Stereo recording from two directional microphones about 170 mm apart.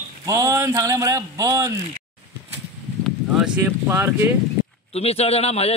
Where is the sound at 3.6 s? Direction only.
15° right (ahead or behind).